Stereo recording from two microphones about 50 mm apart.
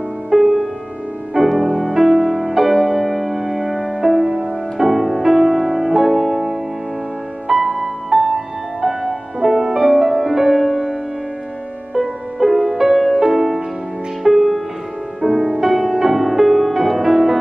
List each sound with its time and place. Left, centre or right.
0.3 s music: centre
12.0 s music: centre
15.2 s music: right
15.6 s music: centre